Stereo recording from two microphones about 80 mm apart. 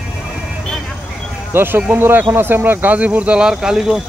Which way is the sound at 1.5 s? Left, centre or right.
Right.